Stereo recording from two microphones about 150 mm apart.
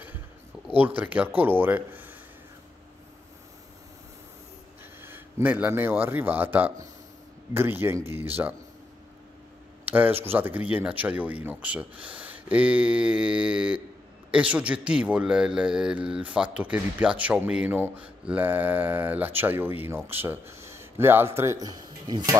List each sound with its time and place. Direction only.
0.7 s speech: 10° right (ahead or behind)
5.0 s a man's voice: 10° right (ahead or behind)
9.8 s a man's voice: 10° right (ahead or behind); by 22.3 s 25° right (ahead or behind)